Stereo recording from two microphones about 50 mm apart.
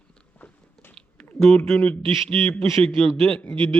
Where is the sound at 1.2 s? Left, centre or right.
Centre.